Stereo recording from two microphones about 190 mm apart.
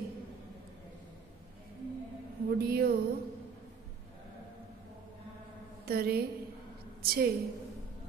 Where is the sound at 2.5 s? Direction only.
55° right (ahead or behind).